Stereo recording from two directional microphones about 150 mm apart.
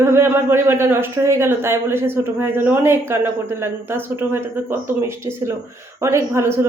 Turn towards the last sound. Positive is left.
turn(degrees=-20)  # may be behind; listen again after turning